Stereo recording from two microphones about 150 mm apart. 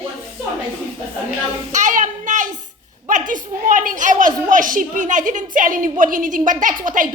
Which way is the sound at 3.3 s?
60° right (ahead or behind).